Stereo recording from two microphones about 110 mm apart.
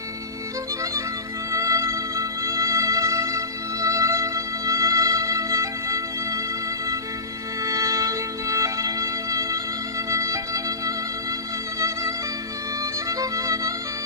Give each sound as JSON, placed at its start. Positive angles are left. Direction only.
{"t": 1.5, "sound": "music", "side_deg": -30}
{"t": 7.6, "sound": "music", "side_deg": -30}
{"t": 12.8, "sound": "music", "side_deg": -30}